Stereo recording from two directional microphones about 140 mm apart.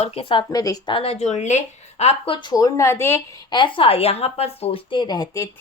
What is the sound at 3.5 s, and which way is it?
Speech, 35° left (ahead or behind).